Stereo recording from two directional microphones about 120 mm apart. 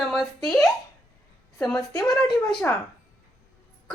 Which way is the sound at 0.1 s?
Centre (ahead or behind).